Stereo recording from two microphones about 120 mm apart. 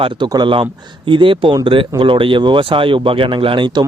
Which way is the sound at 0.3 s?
40° right (ahead or behind).